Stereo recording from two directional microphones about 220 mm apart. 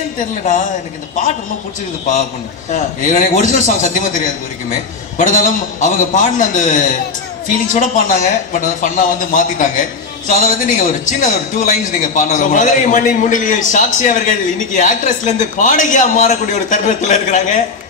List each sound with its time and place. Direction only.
2.7 s a man's voice: 35° left (ahead or behind)
5.1 s a man's voice: 35° left (ahead or behind)